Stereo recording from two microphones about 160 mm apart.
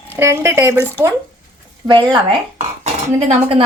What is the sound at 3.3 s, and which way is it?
Speech, 35° right (ahead or behind).